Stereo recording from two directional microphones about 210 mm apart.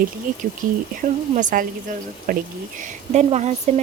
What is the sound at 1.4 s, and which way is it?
Speech, 40° right (ahead or behind).